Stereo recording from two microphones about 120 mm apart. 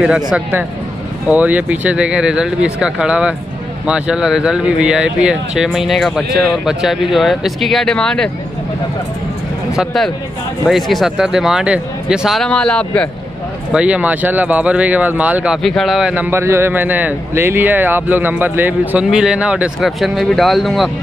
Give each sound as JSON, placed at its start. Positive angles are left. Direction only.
{"t": 0.0, "sound": "speech", "side_deg": -5}
{"t": 9.8, "sound": "speech", "side_deg": 0}
{"t": 13.7, "sound": "speech", "side_deg": -10}
{"t": 16.3, "sound": "speech", "side_deg": -20}